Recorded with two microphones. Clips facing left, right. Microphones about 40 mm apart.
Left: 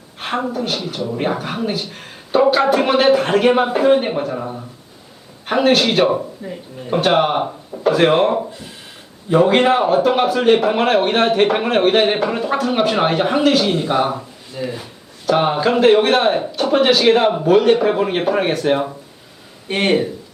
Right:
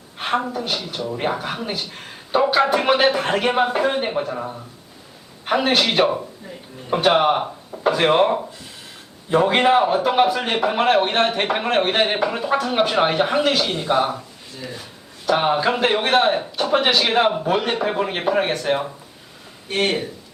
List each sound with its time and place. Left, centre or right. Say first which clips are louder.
0.2 s a man's voice: left 1 dB; centre
6.4 s speech: left 7 dB; left
6.9 s a man's voice: left 1 dB; centre
14.1 s speech: left 3 dB; centre
15.3 s a man's voice: left 3 dB; centre
19.6 s speech: left 4 dB; left